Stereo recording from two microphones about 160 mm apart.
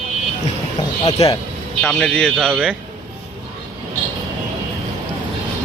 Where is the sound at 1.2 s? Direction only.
40° left (ahead or behind).